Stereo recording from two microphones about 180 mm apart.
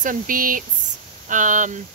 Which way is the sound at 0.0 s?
50° right (ahead or behind).